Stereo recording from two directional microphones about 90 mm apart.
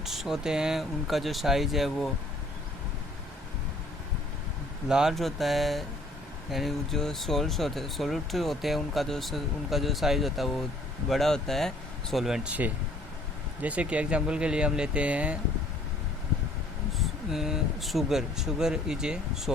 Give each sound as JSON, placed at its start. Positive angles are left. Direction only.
{"t": 0.0, "sound": "speech", "side_deg": -5}
{"t": 4.9, "sound": "speech", "side_deg": -5}
{"t": 12.5, "sound": "speech", "side_deg": -20}
{"t": 17.0, "sound": "speech", "side_deg": -5}